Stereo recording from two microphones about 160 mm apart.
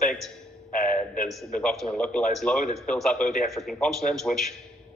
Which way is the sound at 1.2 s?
Centre (ahead or behind).